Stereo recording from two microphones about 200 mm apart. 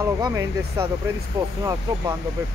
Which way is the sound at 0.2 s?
15° right (ahead or behind).